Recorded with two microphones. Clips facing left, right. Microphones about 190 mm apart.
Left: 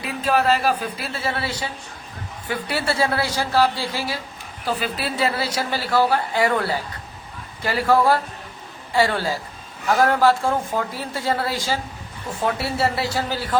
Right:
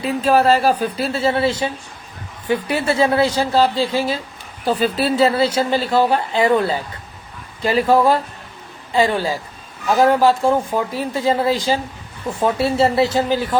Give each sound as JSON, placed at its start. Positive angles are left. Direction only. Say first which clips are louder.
{"t": 0.0, "sound": "speech", "louder": "right 5 dB", "side_deg": -30}